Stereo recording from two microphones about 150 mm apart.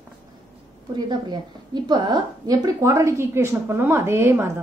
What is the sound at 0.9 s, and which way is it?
A woman's voice, 30° right (ahead or behind).